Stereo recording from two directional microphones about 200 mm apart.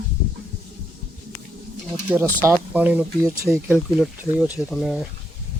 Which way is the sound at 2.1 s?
10° right (ahead or behind).